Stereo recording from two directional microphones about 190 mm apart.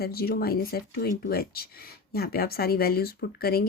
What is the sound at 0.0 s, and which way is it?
Speech, 55° left (ahead or behind).